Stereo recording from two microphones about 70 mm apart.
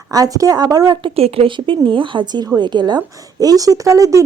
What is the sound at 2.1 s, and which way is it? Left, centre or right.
Speech, right.